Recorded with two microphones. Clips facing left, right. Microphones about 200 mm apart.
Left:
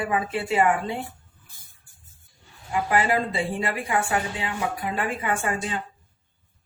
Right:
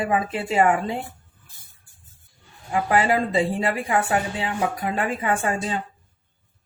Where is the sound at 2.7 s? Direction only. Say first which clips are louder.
Right 2 dB; 40° right (ahead or behind).